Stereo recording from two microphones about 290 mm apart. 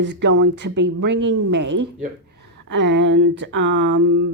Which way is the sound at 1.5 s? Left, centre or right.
Right.